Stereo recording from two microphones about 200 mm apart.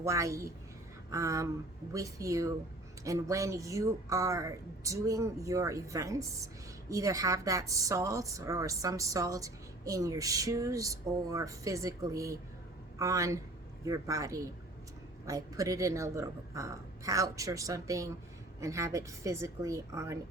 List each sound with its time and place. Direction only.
0.0 s a woman's voice: 15° right (ahead or behind)